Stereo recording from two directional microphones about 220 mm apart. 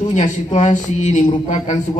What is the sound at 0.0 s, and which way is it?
Speech, 35° left (ahead or behind).